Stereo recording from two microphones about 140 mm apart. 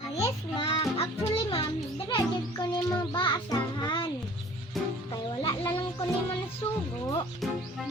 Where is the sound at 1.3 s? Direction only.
35° left (ahead or behind).